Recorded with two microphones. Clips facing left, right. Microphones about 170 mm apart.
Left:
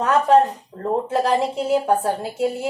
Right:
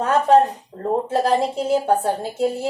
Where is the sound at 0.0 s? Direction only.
35° right (ahead or behind).